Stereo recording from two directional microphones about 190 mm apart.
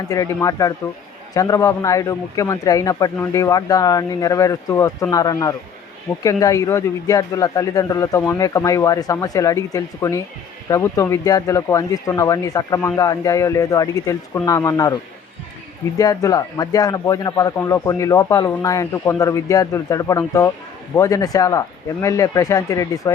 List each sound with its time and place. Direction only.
0.1 s speech: 15° left (ahead or behind)
16.0 s speech: 20° left (ahead or behind)